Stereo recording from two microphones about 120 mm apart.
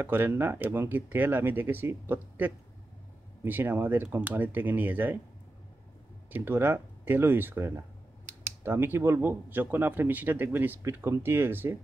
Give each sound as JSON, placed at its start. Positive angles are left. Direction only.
{"t": 0.0, "sound": "speech", "side_deg": -20}
{"t": 6.3, "sound": "speech", "side_deg": -20}